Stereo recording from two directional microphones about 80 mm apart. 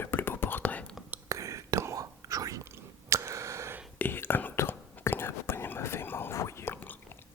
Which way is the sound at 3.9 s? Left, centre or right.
Left.